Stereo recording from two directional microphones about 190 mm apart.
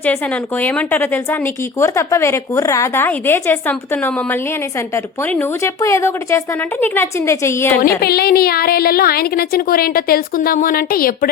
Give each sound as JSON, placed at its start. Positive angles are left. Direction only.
{"t": 0.6, "sound": "a woman's voice", "side_deg": 10}
{"t": 8.0, "sound": "a woman's voice", "side_deg": 55}